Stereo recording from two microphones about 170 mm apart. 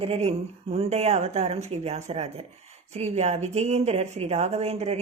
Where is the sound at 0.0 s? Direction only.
35° right (ahead or behind).